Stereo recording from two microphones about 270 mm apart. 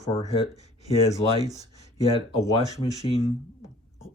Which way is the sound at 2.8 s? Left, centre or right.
Left.